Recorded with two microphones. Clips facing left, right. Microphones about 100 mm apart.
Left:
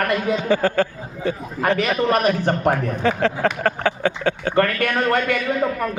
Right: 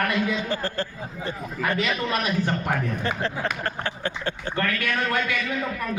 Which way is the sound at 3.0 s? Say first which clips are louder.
Left 8 dB; 90° left.